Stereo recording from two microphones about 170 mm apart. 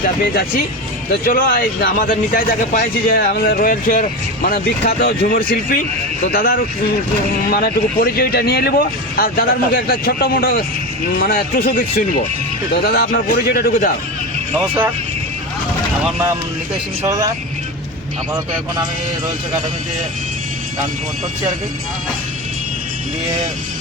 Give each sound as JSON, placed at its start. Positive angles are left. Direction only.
{"t": 1.1, "sound": "speech", "side_deg": 60}
{"t": 17.1, "sound": "speech", "side_deg": -20}